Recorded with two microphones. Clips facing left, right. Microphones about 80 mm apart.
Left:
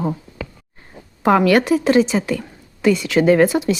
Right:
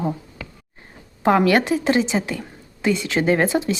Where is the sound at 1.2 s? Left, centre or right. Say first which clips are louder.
Left 3 dB; right.